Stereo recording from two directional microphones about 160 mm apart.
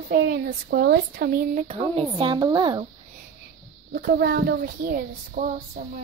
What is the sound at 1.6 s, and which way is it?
Speech, 35° right (ahead or behind).